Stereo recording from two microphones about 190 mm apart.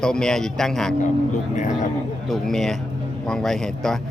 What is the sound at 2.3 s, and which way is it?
A man's voice, centre (ahead or behind).